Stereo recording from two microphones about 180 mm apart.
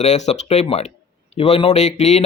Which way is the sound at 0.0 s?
40° left (ahead or behind).